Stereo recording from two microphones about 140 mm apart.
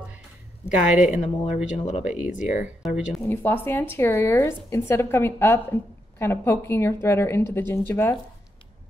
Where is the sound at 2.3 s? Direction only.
60° left (ahead or behind).